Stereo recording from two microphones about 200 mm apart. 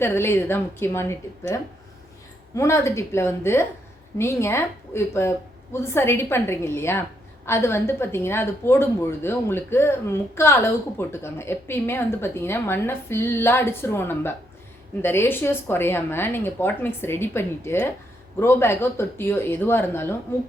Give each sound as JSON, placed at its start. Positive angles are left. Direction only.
{"t": 0.0, "sound": "speech", "side_deg": 10}
{"t": 2.6, "sound": "speech", "side_deg": 15}